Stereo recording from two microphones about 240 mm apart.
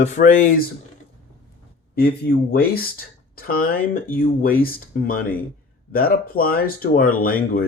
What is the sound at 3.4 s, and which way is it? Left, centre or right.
Speech, left.